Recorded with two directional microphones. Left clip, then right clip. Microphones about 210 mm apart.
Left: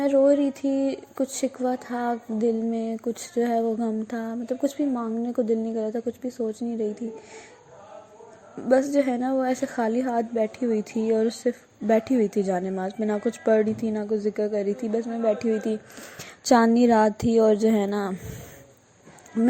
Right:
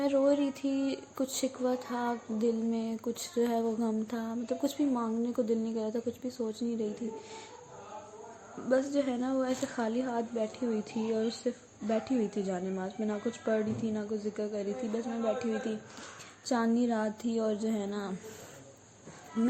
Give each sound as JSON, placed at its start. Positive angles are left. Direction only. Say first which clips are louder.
{"t": 0.0, "sound": "speech", "louder": "left 8 dB", "side_deg": 20}
{"t": 8.7, "sound": "a woman's voice", "louder": "left 8 dB", "side_deg": 30}